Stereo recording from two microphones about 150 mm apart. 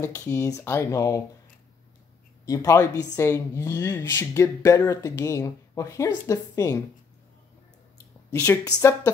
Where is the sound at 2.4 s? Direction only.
20° left (ahead or behind).